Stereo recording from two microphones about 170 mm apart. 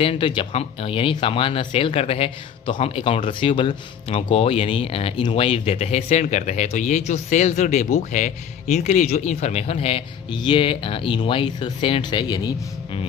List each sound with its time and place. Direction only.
0.0 s speech: 30° left (ahead or behind)